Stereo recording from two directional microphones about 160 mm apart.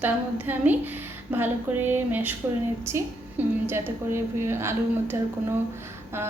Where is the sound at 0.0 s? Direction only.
10° right (ahead or behind).